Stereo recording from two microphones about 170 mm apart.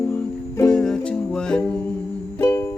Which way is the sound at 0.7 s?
5° left (ahead or behind).